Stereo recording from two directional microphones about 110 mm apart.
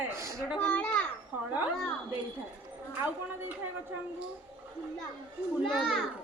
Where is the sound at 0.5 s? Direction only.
10° left (ahead or behind).